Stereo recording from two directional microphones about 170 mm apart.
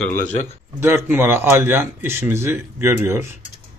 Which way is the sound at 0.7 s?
15° right (ahead or behind).